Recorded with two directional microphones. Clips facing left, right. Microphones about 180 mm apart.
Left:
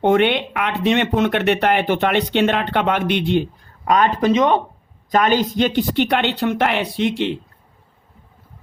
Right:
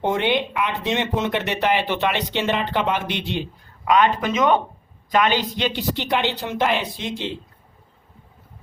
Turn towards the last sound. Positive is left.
turn(degrees=65)  # may be behind; listen again after turning